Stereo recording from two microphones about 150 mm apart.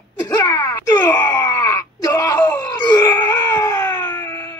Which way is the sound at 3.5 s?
20° left (ahead or behind).